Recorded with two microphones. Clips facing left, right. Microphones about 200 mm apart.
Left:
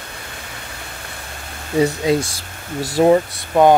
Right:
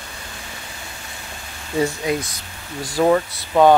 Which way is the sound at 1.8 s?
25° left (ahead or behind).